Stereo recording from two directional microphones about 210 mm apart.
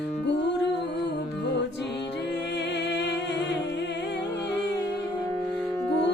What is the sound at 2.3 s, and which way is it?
Music, 55° left (ahead or behind).